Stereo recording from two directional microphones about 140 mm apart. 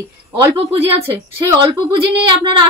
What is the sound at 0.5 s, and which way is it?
A woman's voice, 40° right (ahead or behind).